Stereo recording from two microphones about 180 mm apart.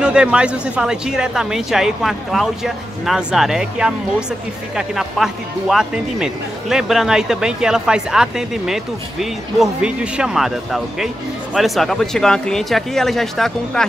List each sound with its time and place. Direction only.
0.0 s speech: 5° right (ahead or behind)